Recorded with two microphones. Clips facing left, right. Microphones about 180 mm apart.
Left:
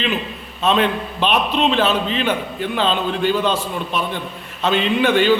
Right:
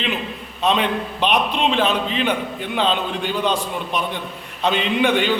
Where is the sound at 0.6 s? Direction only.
15° right (ahead or behind).